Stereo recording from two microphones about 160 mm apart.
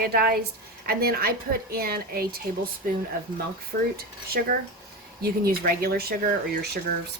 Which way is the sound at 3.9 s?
70° right (ahead or behind).